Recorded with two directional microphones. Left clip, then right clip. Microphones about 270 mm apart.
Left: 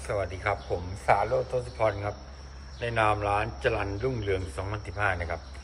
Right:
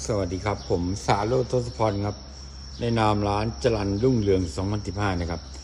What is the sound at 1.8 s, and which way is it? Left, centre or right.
Speech, centre.